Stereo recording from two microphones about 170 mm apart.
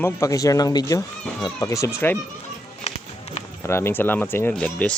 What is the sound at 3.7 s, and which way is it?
Speech, 15° left (ahead or behind).